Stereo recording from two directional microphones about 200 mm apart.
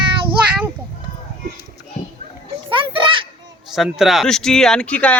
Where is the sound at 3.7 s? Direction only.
Centre (ahead or behind).